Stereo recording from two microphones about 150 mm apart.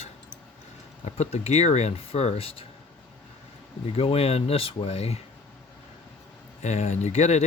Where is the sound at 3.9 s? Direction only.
40° left (ahead or behind).